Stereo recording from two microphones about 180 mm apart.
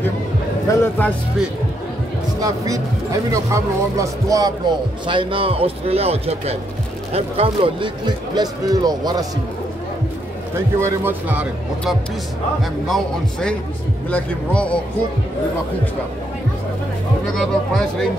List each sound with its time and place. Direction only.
0.7 s speech: 10° left (ahead or behind)
2.4 s speech: 20° right (ahead or behind)
10.8 s speech: 10° right (ahead or behind)
12.8 s speech: 5° left (ahead or behind)
17.3 s speech: centre (ahead or behind)